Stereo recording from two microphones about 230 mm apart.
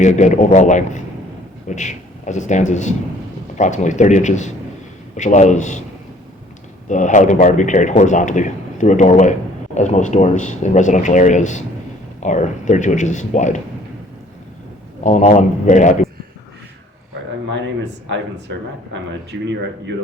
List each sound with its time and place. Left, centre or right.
0.0 s speech: left
6.8 s speech: left
15.0 s speech: left
18.1 s speech: right